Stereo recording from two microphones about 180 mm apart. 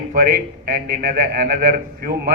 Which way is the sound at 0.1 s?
50° right (ahead or behind).